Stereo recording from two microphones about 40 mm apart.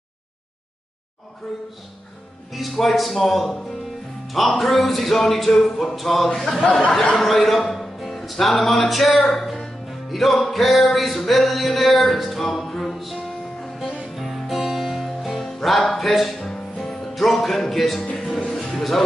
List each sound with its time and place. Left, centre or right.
2.5 s speech: centre
4.6 s a man's voice: centre
7.2 s music: centre
18.0 s speech: centre
18.5 s music: centre